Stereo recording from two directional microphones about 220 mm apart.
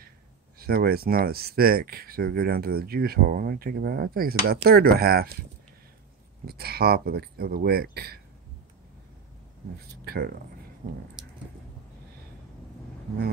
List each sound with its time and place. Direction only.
0.6 s speech: 45° right (ahead or behind)
6.4 s speech: 45° right (ahead or behind)
10.0 s speech: 45° right (ahead or behind)